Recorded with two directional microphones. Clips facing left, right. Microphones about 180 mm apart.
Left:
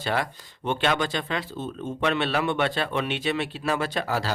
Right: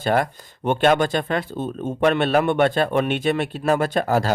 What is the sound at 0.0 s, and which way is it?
A man's voice, 50° right (ahead or behind).